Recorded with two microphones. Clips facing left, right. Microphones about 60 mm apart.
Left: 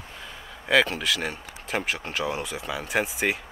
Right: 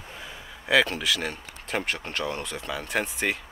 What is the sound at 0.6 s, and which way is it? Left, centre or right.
Speech, centre.